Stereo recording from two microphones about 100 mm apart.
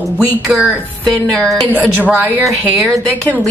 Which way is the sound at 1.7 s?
15° right (ahead or behind).